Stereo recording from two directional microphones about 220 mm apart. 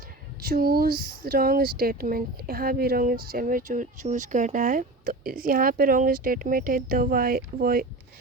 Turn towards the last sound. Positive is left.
turn(degrees=-40)  # may be behind; listen again after turning